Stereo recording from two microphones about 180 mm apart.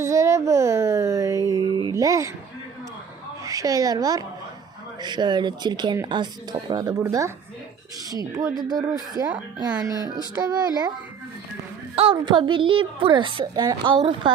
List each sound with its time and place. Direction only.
0.0 s a sound: 15° right (ahead or behind)
3.4 s a woman's voice: 20° right (ahead or behind)
8.4 s a woman's voice: 20° right (ahead or behind)
11.9 s a woman's voice: 30° right (ahead or behind)